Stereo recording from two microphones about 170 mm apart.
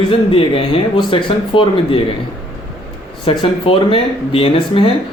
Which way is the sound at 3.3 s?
30° left (ahead or behind).